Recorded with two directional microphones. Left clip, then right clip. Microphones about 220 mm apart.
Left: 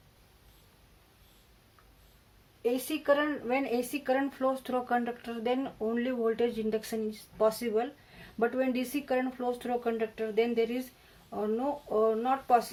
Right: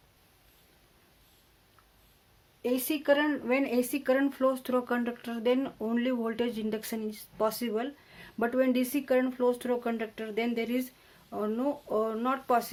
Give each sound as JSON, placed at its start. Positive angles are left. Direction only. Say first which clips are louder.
{"t": 2.6, "sound": "speech", "louder": "even", "side_deg": -50}